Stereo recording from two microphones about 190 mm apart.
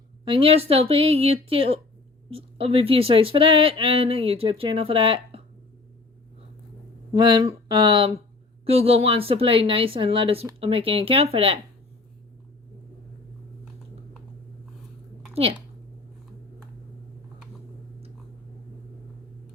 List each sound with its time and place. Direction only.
0.3 s speech: 30° right (ahead or behind)
7.1 s speech: 25° right (ahead or behind)
15.4 s speech: 30° right (ahead or behind)